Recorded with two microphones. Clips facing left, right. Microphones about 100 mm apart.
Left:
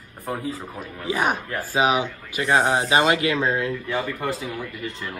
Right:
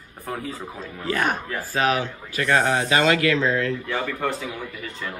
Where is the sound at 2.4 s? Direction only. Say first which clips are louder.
Left 1 dB; 20° left (ahead or behind).